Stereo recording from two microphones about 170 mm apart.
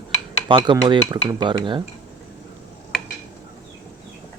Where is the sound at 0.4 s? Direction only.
25° right (ahead or behind).